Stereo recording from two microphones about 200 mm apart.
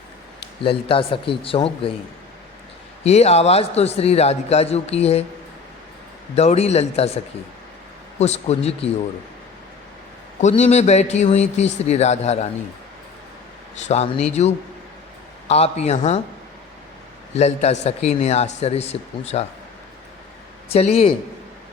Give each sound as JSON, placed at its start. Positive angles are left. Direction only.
{"t": 0.6, "sound": "speech", "side_deg": 25}
{"t": 3.0, "sound": "a man's voice", "side_deg": 30}
{"t": 6.3, "sound": "a man's voice", "side_deg": 30}
{"t": 8.2, "sound": "a man's voice", "side_deg": 30}
{"t": 10.4, "sound": "a man's voice", "side_deg": 35}
{"t": 13.8, "sound": "a man's voice", "side_deg": 35}
{"t": 17.3, "sound": "a man's voice", "side_deg": 35}
{"t": 20.7, "sound": "speech", "side_deg": 30}